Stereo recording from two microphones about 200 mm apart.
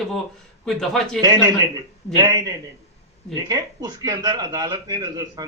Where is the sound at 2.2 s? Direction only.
20° right (ahead or behind).